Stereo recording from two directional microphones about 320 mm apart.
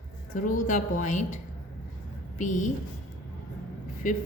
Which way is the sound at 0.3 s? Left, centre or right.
Left.